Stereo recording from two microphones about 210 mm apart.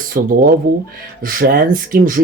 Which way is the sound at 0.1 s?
45° right (ahead or behind).